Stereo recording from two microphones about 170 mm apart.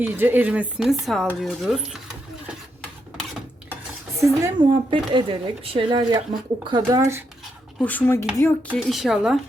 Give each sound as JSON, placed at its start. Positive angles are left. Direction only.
{"t": 0.0, "sound": "speech", "side_deg": -10}
{"t": 4.2, "sound": "speech", "side_deg": -15}
{"t": 4.6, "sound": "speech", "side_deg": -30}
{"t": 7.8, "sound": "speech", "side_deg": 10}
{"t": 8.8, "sound": "speech", "side_deg": 0}